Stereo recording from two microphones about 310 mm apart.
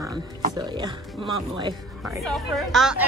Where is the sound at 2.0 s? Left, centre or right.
Centre.